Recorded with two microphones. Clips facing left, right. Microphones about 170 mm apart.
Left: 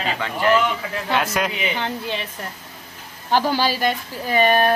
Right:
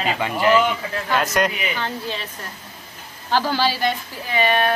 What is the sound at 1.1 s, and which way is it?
Speech, centre (ahead or behind).